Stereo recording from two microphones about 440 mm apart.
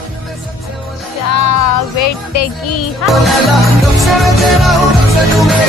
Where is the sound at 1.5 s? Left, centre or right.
Left.